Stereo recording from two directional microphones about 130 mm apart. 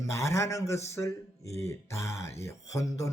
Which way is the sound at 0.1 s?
20° left (ahead or behind).